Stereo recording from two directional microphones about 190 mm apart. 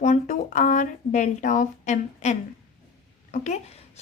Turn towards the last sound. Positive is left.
turn(degrees=35)  # may be behind; listen again after turning